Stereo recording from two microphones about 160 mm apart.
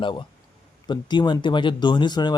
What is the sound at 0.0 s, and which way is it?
Speech, 30° left (ahead or behind).